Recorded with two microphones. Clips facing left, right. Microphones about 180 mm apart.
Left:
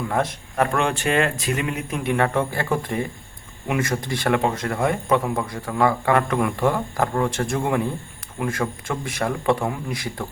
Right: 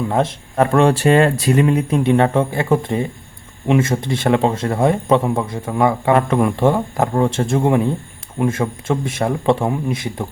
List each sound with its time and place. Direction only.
0.1 s a man's voice: 25° right (ahead or behind)